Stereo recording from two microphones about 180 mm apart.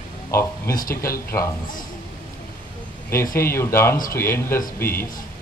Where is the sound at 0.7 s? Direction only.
50° left (ahead or behind).